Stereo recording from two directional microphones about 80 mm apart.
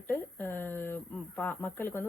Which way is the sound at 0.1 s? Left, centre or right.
Left.